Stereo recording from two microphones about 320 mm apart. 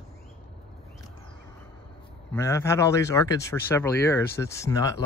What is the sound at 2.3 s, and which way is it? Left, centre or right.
Speech, centre.